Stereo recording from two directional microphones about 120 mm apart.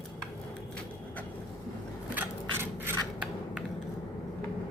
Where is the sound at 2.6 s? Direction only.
20° right (ahead or behind).